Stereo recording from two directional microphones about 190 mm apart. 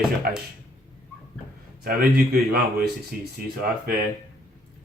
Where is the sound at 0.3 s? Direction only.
55° right (ahead or behind).